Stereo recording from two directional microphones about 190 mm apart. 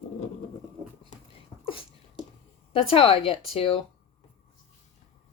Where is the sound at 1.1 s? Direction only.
40° left (ahead or behind).